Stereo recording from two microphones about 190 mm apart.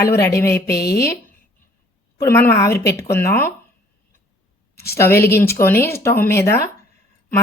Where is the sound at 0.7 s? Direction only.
55° left (ahead or behind).